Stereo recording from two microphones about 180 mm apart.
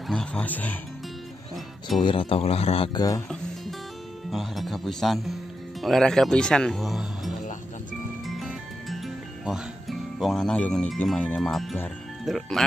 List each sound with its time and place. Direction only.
0.1 s speech: 5° left (ahead or behind)
2.0 s speech: 25° left (ahead or behind)
4.3 s speech: centre (ahead or behind)
8.3 s music: centre (ahead or behind)
12.3 s speech: centre (ahead or behind)